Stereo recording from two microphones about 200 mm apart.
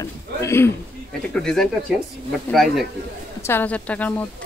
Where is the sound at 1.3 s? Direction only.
5° left (ahead or behind).